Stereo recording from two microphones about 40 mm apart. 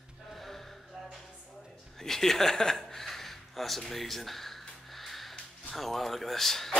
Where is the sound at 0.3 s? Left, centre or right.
Centre.